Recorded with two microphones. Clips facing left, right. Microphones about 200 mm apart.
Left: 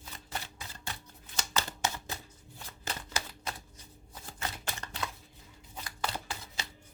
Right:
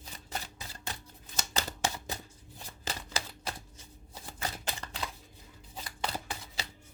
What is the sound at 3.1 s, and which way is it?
Typewriter, 30° right (ahead or behind).